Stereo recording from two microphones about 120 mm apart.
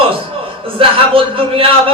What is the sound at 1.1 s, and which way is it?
Speech, 50° right (ahead or behind).